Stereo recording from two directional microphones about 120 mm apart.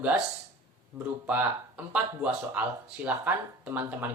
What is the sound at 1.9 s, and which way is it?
Speech, 10° right (ahead or behind).